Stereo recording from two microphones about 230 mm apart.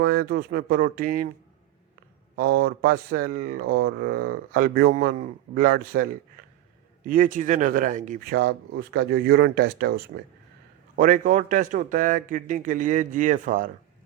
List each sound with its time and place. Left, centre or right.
0.0 s speech: right
2.3 s speech: right